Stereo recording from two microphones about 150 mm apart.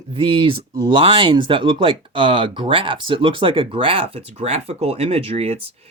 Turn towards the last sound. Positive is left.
turn(degrees=-40)  # may be behind; listen again after turning